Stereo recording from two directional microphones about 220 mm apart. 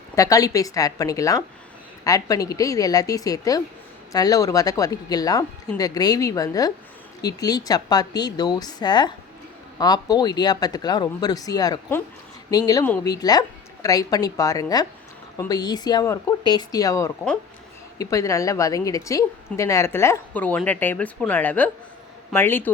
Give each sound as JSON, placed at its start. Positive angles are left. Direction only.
{"t": 0.2, "sound": "a woman's voice", "side_deg": 15}